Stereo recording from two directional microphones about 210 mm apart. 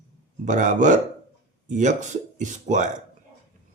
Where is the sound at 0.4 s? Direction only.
35° right (ahead or behind).